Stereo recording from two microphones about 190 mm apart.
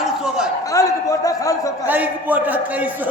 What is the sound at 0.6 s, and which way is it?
A man's voice, 15° left (ahead or behind).